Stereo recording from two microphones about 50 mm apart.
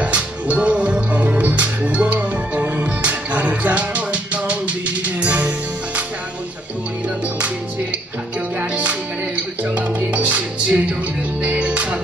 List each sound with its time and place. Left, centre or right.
0.0 s music: right
8.5 s music: right